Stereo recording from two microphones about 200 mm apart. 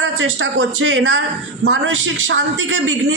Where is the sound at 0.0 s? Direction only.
75° right (ahead or behind).